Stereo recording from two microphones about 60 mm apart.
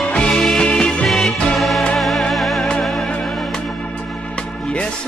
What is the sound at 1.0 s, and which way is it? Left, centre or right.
Music, centre.